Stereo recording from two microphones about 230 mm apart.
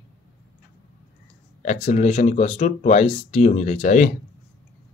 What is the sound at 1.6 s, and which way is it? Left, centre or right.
Speech, left.